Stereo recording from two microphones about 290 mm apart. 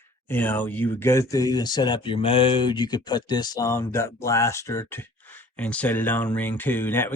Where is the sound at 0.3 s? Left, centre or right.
Centre.